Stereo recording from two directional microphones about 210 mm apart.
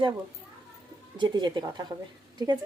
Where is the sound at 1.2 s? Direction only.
20° right (ahead or behind).